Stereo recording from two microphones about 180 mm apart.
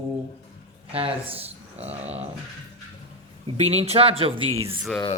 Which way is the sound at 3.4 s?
35° right (ahead or behind).